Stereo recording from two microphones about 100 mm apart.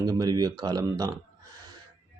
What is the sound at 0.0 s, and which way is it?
Speech, 40° right (ahead or behind).